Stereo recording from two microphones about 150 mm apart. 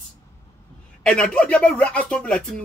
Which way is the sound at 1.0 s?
5° left (ahead or behind).